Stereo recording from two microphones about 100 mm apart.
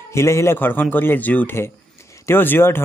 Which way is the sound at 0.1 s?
25° left (ahead or behind).